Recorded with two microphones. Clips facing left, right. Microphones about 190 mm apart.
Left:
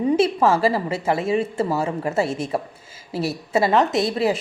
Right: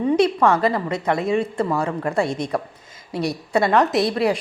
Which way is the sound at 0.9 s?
5° left (ahead or behind).